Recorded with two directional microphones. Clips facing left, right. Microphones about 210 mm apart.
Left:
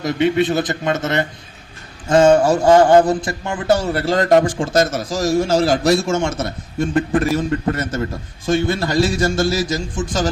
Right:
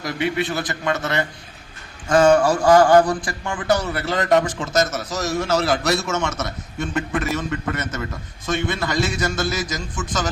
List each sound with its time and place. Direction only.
0.0 s a man's voice: 25° left (ahead or behind)